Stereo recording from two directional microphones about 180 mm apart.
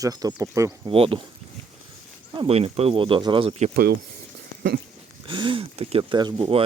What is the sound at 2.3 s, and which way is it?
Speech, 30° right (ahead or behind).